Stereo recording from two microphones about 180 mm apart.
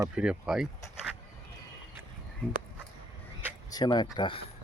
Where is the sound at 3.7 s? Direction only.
20° left (ahead or behind).